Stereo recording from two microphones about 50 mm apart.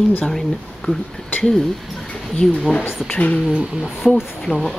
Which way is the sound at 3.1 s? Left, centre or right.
Left.